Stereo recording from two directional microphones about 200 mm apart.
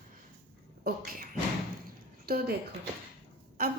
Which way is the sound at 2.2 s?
50° right (ahead or behind).